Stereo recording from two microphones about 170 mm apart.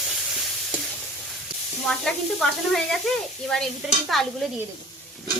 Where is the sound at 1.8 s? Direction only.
Centre (ahead or behind).